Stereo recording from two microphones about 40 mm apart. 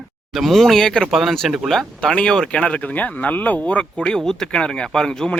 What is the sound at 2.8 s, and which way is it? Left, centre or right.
Speech, left.